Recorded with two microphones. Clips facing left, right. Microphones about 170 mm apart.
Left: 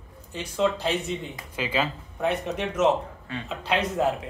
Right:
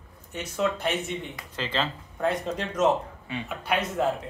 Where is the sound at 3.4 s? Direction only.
25° left (ahead or behind).